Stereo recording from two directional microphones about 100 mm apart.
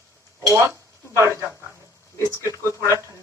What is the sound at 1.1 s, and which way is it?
Speech, 30° right (ahead or behind).